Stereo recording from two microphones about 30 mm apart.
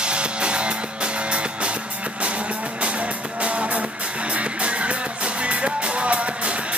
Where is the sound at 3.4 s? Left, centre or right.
Right.